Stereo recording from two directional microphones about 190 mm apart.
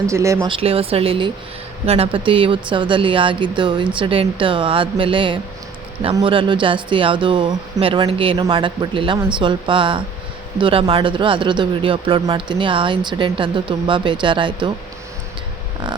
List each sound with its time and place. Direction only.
0.1 s speech: 15° right (ahead or behind)
0.4 s speech: 30° right (ahead or behind)